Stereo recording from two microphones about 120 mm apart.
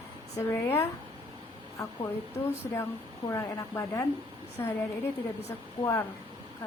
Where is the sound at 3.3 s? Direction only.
25° left (ahead or behind).